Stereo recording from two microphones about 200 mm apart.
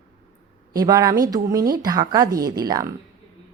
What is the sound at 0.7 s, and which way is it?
Speech, 20° right (ahead or behind).